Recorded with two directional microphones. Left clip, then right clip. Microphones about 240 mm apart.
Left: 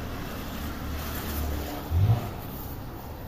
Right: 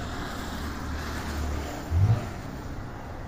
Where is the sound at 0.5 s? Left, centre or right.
Left.